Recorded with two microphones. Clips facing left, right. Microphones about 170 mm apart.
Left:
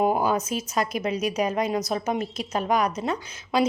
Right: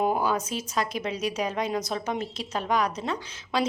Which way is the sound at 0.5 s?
45° left (ahead or behind).